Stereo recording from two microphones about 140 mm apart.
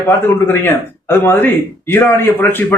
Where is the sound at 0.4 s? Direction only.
15° left (ahead or behind).